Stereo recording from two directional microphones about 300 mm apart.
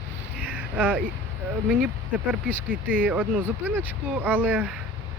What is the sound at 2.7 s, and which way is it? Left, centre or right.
Speech, centre.